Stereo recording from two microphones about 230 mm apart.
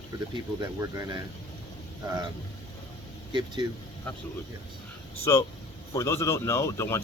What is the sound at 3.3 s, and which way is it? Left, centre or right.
Speech, centre.